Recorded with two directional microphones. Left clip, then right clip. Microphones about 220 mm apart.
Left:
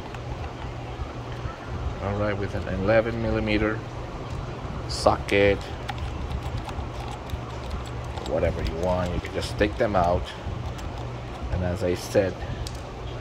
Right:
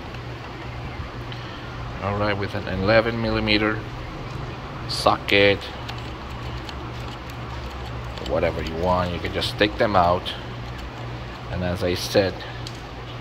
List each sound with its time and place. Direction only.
2.0 s speech: 15° left (ahead or behind)
4.8 s speech: 20° left (ahead or behind)
8.4 s speech: 10° left (ahead or behind)
11.6 s speech: 15° left (ahead or behind)